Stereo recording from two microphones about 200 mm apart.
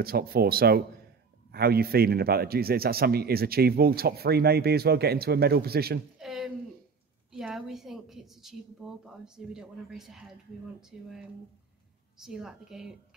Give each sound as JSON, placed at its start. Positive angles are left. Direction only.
{"t": 0.0, "sound": "a man's voice", "side_deg": -50}
{"t": 6.1, "sound": "a sound", "side_deg": 0}
{"t": 7.3, "sound": "a woman's voice", "side_deg": 0}
{"t": 12.2, "sound": "a woman's voice", "side_deg": 0}